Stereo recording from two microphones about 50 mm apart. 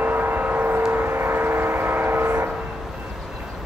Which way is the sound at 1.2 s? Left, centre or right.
Right.